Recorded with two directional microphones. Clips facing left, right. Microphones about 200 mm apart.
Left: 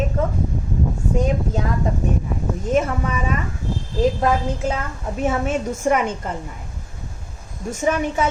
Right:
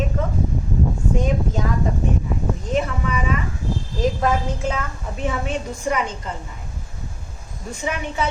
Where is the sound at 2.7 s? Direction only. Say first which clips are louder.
Left 3 dB; 45° left (ahead or behind).